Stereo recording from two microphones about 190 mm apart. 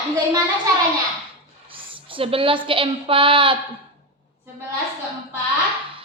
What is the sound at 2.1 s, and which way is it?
A woman's voice, 30° right (ahead or behind).